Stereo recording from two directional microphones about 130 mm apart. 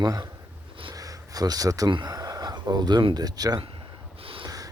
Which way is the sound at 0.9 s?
25° right (ahead or behind).